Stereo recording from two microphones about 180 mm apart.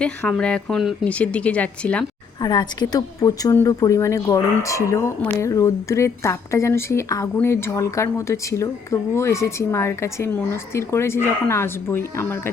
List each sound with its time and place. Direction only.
0.0 s a woman's voice: 5° left (ahead or behind)
2.4 s a woman's voice: 20° left (ahead or behind)